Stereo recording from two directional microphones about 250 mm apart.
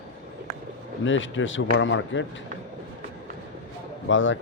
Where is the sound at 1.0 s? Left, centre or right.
Left.